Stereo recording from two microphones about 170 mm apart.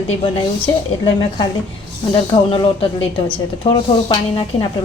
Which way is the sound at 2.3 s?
30° left (ahead or behind).